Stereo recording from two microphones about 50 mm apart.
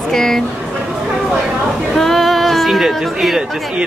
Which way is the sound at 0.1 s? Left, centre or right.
Centre.